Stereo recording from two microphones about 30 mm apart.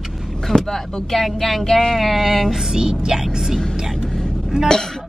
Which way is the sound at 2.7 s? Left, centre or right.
Right.